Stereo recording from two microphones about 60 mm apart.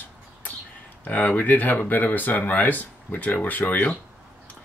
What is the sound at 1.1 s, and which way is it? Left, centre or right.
Speech, left.